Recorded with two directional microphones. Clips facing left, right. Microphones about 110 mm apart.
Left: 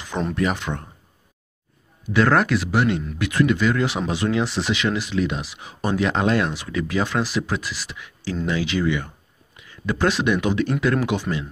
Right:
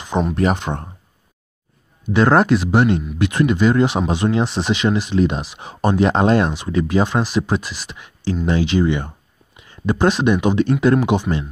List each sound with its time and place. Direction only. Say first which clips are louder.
0.4 s speech: right 2 dB; 30° right (ahead or behind)
2.1 s speech: right 4 dB; 25° right (ahead or behind)
9.6 s a sound: right 5 dB; 30° right (ahead or behind)
9.9 s speech: right 4 dB; 25° right (ahead or behind)